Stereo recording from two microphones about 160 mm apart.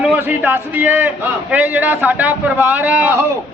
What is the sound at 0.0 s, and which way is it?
A man's voice, 10° right (ahead or behind).